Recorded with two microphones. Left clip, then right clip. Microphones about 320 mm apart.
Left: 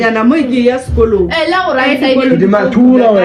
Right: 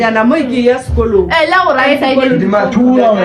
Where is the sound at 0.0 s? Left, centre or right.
Right.